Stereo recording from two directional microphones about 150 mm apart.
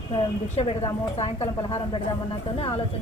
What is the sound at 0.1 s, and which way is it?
A woman's voice, 40° left (ahead or behind).